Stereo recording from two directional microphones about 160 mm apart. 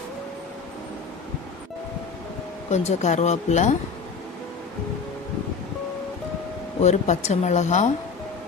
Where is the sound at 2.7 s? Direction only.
45° left (ahead or behind).